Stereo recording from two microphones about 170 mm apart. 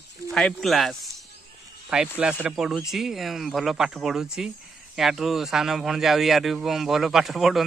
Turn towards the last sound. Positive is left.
turn(degrees=0)  # may be behind; listen again after turning